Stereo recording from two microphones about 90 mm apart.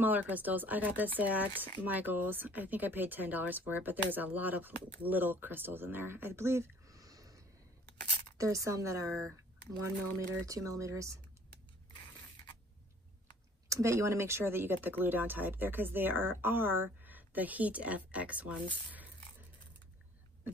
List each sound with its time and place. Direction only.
0.0 s speech: 20° right (ahead or behind)
4.7 s speech: 55° left (ahead or behind)
5.0 s speech: 20° right (ahead or behind)
13.7 s speech: 35° right (ahead or behind); by 18.5 s 15° right (ahead or behind)